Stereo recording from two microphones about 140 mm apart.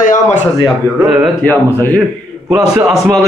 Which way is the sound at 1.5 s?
10° left (ahead or behind).